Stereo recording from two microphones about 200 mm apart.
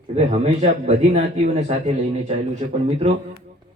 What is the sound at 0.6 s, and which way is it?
A man's voice, 35° right (ahead or behind).